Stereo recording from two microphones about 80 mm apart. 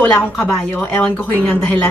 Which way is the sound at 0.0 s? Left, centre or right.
Centre.